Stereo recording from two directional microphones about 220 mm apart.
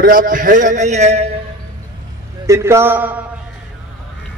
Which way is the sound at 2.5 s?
10° right (ahead or behind).